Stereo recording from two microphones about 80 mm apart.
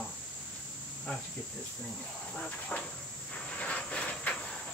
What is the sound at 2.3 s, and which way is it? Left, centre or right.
Speech, centre.